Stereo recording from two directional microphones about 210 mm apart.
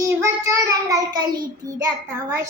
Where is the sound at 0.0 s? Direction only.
15° right (ahead or behind).